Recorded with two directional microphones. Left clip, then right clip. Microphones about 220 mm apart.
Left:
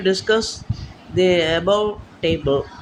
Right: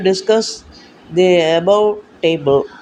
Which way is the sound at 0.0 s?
10° right (ahead or behind).